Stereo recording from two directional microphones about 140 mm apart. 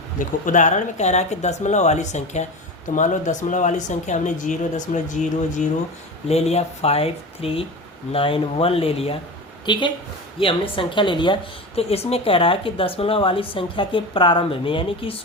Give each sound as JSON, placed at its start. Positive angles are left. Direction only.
{"t": 0.4, "sound": "speech", "side_deg": 65}
{"t": 6.2, "sound": "speech", "side_deg": 50}
{"t": 9.7, "sound": "speech", "side_deg": 35}
{"t": 11.8, "sound": "speech", "side_deg": 45}